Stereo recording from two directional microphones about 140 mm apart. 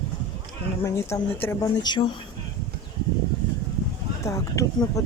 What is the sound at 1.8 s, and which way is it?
Speech, 35° left (ahead or behind).